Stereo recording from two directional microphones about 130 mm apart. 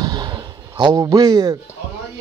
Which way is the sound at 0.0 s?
35° right (ahead or behind).